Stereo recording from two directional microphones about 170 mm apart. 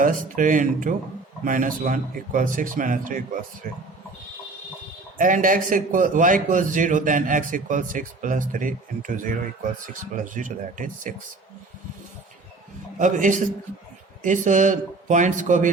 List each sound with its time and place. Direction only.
0.0 s a man's voice: 50° right (ahead or behind)
5.1 s a man's voice: 50° right (ahead or behind)
13.0 s a man's voice: 50° right (ahead or behind)